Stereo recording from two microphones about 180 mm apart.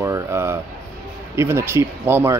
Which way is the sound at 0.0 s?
15° right (ahead or behind).